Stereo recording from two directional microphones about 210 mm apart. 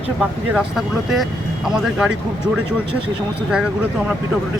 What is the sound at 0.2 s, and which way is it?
Speech, centre (ahead or behind).